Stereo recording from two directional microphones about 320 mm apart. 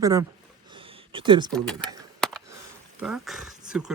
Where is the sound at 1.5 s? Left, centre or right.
Centre.